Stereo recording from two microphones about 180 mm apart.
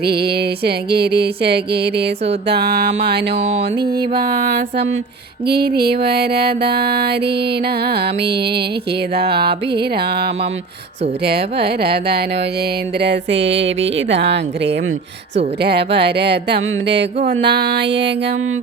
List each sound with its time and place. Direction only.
0.0 s music: 60° right (ahead or behind)
3.8 s mantra: 25° right (ahead or behind)
4.2 s music: 65° right (ahead or behind)
13.0 s a woman's voice: 80° right
15.6 s music: 70° right (ahead or behind)
17.2 s a woman's voice: 80° right